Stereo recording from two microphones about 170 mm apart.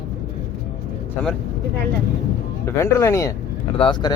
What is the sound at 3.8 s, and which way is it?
Speech, 30° left (ahead or behind).